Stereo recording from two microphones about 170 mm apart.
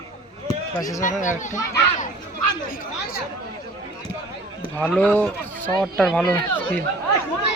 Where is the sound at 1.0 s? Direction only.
50° left (ahead or behind).